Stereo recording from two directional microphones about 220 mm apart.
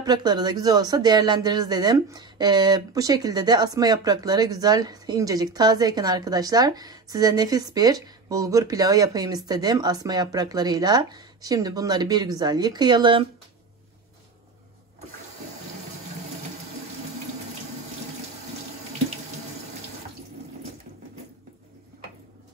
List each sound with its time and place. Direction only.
0.0 s speech: 20° right (ahead or behind)